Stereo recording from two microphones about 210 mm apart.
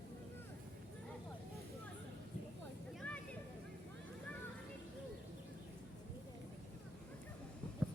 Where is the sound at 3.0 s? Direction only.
5° left (ahead or behind).